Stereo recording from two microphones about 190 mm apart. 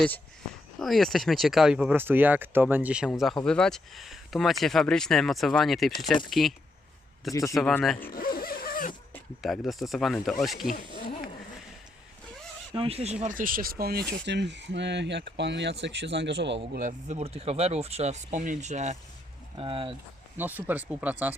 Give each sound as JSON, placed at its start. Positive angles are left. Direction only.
{"t": 0.8, "sound": "speech", "side_deg": 0}
{"t": 7.5, "sound": "speech", "side_deg": 5}
{"t": 7.9, "sound": "a sound", "side_deg": 50}
{"t": 9.4, "sound": "speech", "side_deg": 0}
{"t": 12.7, "sound": "speech", "side_deg": -30}
{"t": 13.2, "sound": "speech", "side_deg": -45}
{"t": 14.1, "sound": "speech", "side_deg": -65}
{"t": 17.1, "sound": "speech", "side_deg": -35}
{"t": 20.3, "sound": "speech", "side_deg": -10}